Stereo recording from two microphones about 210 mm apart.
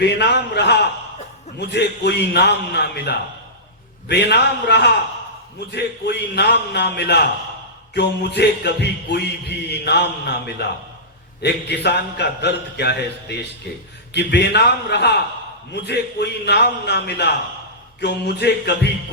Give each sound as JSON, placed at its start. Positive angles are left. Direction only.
{"t": 0.0, "sound": "a man's voice", "side_deg": 55}